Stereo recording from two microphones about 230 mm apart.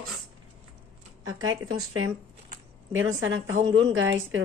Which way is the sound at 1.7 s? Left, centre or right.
Right.